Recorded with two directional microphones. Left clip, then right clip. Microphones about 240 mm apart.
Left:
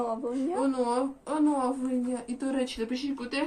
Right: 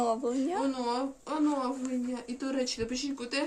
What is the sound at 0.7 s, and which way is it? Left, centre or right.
Speech, centre.